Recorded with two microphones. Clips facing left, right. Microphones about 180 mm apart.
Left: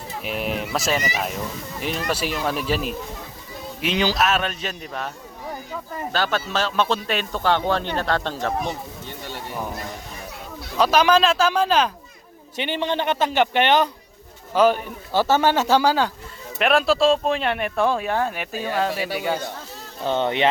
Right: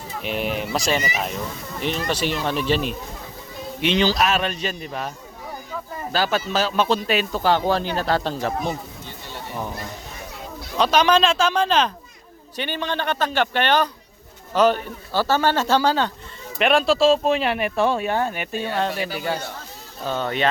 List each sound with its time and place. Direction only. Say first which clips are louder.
0.2 s speech: right 1 dB; centre (ahead or behind)
10.8 s speech: even; 5° left (ahead or behind)
12.5 s a man's voice: left 2 dB; 20° left (ahead or behind); by 19.0 s 5° left (ahead or behind)
20.1 s a man's voice: left 3 dB; 20° left (ahead or behind)